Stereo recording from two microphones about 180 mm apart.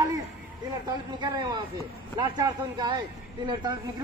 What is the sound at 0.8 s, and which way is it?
A man's voice, 20° right (ahead or behind).